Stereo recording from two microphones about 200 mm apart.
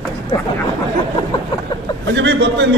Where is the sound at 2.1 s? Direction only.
60° right (ahead or behind).